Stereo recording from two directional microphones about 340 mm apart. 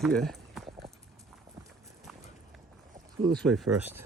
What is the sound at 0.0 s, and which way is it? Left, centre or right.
Clip-clop, centre.